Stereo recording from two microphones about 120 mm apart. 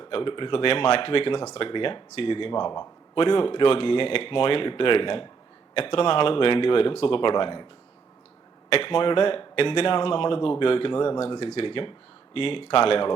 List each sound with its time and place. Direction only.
0.0 s speech: 45° left (ahead or behind)
8.7 s speech: 50° left (ahead or behind)